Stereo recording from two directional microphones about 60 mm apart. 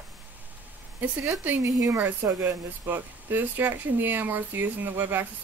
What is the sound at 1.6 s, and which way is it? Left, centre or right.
Speech, right.